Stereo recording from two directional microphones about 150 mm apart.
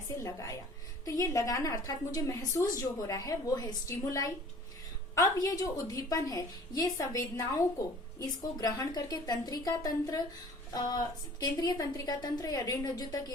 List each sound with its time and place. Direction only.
0.2 s a woman's voice: 20° left (ahead or behind)